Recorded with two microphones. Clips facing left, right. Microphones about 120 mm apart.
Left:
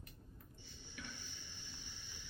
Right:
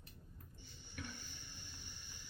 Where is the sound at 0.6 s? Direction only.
50° right (ahead or behind).